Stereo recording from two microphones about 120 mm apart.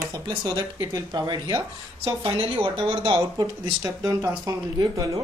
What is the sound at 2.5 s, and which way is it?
Speech, 50° right (ahead or behind).